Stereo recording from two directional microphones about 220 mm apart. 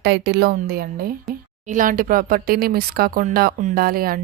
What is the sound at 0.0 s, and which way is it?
Speech, 50° right (ahead or behind).